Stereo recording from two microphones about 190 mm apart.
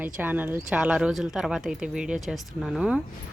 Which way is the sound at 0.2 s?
10° right (ahead or behind).